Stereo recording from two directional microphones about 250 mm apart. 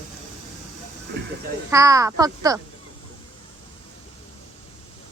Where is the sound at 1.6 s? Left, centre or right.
Centre.